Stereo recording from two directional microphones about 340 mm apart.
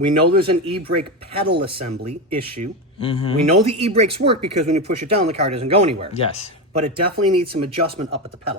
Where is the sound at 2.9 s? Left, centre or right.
Centre.